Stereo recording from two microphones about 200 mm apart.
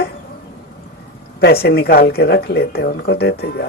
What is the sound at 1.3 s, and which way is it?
Speech, 55° left (ahead or behind).